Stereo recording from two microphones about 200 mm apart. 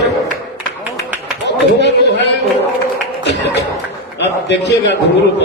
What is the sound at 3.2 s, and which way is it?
Music, 60° left (ahead or behind).